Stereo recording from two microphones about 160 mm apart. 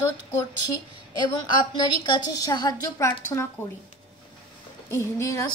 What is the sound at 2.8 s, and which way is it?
Speech, 20° left (ahead or behind).